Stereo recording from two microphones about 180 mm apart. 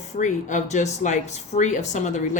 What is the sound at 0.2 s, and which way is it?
Speech, 45° left (ahead or behind).